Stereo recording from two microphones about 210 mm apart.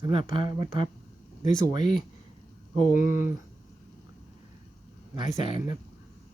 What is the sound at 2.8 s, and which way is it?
Speech, 40° left (ahead or behind).